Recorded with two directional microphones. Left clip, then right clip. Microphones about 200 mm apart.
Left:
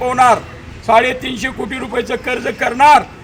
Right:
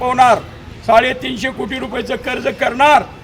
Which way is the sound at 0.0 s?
Centre (ahead or behind).